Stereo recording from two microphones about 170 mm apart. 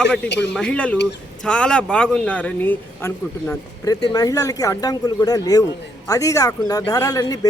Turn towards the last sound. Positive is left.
turn(degrees=20)  # may be behind; listen again after turning